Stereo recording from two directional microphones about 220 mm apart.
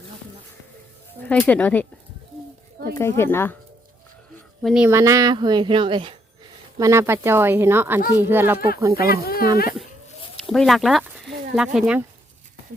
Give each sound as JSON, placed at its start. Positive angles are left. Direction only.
{"t": 1.3, "sound": "speech", "side_deg": 5}
{"t": 2.9, "sound": "speech", "side_deg": 10}
{"t": 4.6, "sound": "a woman's voice", "side_deg": -5}
{"t": 9.0, "sound": "speech", "side_deg": 45}
{"t": 10.5, "sound": "speech", "side_deg": 0}